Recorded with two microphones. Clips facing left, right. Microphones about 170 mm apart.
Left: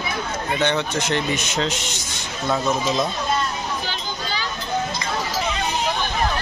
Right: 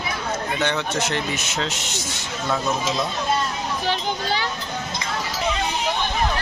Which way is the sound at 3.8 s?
65° right (ahead or behind).